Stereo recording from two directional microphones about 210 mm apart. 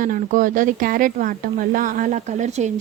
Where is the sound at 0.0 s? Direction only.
40° right (ahead or behind).